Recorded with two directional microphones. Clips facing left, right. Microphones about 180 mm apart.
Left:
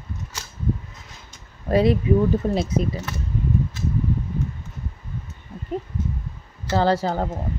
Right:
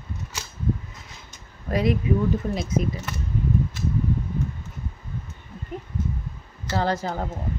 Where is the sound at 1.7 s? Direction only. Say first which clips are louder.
Left 5 dB; 30° left (ahead or behind).